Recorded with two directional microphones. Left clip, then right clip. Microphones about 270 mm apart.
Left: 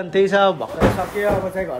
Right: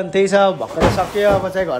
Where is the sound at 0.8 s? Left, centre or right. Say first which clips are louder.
Right 3 dB; right.